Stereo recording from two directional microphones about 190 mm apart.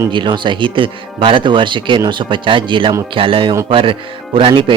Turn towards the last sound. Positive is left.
turn(degrees=-25)  # may be behind; listen again after turning